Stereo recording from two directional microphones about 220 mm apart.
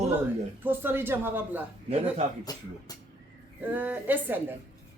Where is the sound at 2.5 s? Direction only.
15° left (ahead or behind).